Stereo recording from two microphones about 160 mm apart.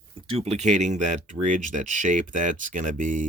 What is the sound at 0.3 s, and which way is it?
Speech, 40° right (ahead or behind).